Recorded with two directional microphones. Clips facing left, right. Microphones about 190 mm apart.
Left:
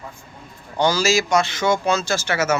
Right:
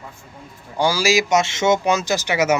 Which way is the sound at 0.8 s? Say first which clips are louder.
Even; 10° right (ahead or behind).